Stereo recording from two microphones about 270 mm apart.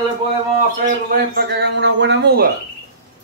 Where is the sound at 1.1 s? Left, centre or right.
Right.